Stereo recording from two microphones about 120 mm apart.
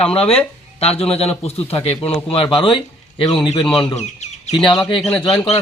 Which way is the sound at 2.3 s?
45° left (ahead or behind).